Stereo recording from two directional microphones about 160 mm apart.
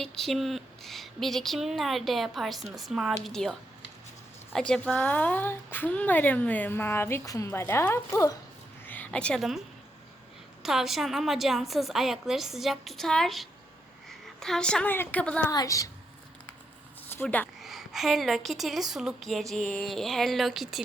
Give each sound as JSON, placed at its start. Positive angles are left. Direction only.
{"t": 0.0, "sound": "a woman's voice", "side_deg": 0}
{"t": 10.6, "sound": "a woman's voice", "side_deg": 0}
{"t": 15.4, "sound": "a woman's voice", "side_deg": 20}
{"t": 17.2, "sound": "a woman's voice", "side_deg": 10}
{"t": 17.6, "sound": "a woman's voice", "side_deg": 0}